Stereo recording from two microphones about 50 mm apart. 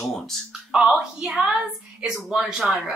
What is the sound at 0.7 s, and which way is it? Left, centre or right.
A woman's voice, centre.